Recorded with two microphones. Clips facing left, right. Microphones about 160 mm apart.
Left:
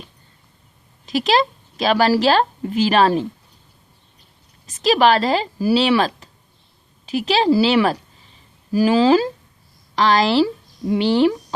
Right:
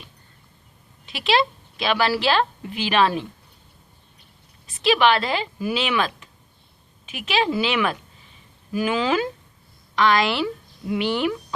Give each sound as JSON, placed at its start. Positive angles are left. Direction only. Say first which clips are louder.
{"t": 1.0, "sound": "a woman's voice", "louder": "left 4 dB", "side_deg": 40}
{"t": 4.6, "sound": "a woman's voice", "louder": "left 3 dB", "side_deg": 40}